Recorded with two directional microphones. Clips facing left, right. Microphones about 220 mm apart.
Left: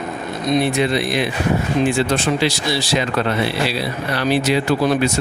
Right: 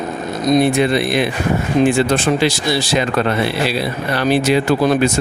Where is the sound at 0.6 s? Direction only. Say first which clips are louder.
Right 3 dB; 50° right (ahead or behind).